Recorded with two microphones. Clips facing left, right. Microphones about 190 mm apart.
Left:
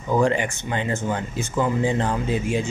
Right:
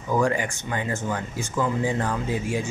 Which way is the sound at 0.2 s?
25° left (ahead or behind).